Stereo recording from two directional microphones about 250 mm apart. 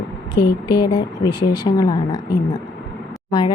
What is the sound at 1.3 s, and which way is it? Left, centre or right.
A woman's voice, centre.